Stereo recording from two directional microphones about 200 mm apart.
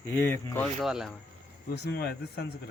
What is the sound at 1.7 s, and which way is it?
Speech, 55° left (ahead or behind).